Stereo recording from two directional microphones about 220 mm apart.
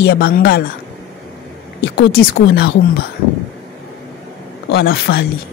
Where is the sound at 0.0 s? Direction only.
45° left (ahead or behind).